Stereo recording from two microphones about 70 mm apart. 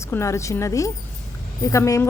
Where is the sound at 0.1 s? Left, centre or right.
Left.